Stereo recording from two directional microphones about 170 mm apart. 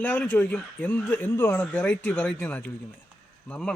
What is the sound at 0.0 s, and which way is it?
Speech, 5° left (ahead or behind).